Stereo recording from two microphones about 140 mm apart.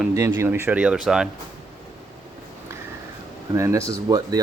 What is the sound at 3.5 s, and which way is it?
Speech, 20° right (ahead or behind).